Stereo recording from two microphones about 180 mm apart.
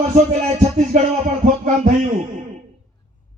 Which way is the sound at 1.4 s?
45° right (ahead or behind).